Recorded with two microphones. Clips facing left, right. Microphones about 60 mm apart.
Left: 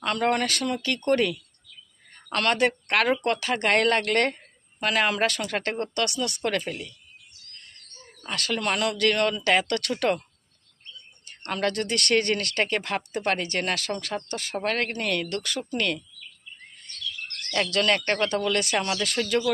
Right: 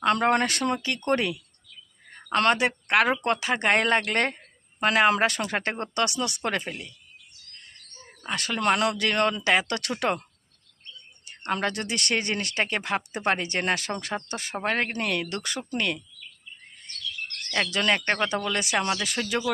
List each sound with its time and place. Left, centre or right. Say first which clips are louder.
0.0 s speech: right 2 dB; right
8.3 s speech: right 3 dB; centre
9.5 s speech: left 1 dB; centre
11.3 s speech: even; centre
17.5 s speech: left 1 dB; centre